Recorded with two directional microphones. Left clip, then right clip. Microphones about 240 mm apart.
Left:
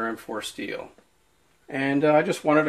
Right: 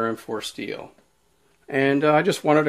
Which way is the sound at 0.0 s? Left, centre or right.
Right.